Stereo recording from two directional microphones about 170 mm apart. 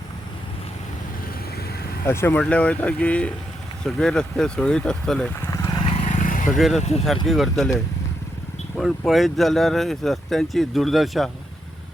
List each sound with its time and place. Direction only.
2.0 s speech: 15° left (ahead or behind)
5.5 s vehicle: 20° left (ahead or behind)
5.8 s vehicle: 40° left (ahead or behind)
6.6 s speech: centre (ahead or behind)
8.7 s speech: centre (ahead or behind)